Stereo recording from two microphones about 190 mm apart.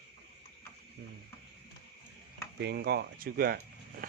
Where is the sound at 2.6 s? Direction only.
60° right (ahead or behind).